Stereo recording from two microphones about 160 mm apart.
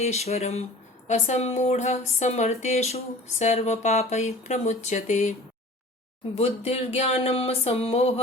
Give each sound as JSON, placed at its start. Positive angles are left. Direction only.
{"t": 0.0, "sound": "speech", "side_deg": 40}
{"t": 6.3, "sound": "speech", "side_deg": 40}